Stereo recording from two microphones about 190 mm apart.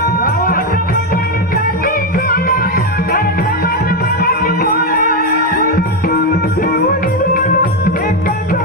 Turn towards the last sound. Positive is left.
turn(degrees=45)  # may be behind; listen again after turning